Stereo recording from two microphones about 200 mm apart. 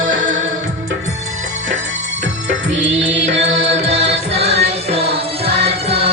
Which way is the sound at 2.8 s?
65° right (ahead or behind).